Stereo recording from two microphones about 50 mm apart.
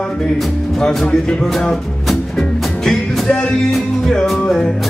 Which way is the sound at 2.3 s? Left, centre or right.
Centre.